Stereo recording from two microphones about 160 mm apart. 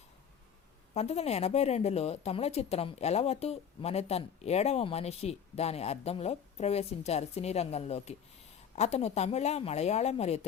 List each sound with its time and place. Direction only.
0.9 s a woman's voice: 40° left (ahead or behind)